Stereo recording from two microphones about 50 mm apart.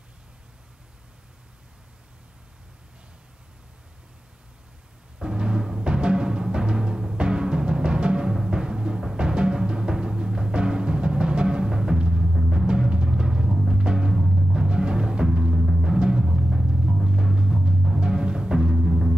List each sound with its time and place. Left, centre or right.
5.2 s timpani: centre
18.8 s music: centre